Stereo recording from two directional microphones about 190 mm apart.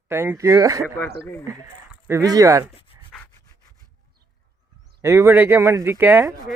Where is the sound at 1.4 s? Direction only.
15° right (ahead or behind).